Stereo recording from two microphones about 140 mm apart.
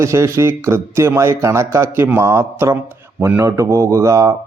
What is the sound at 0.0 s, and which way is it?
A man's voice, 20° right (ahead or behind).